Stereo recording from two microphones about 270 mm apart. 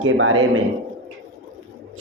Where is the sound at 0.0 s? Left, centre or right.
Right.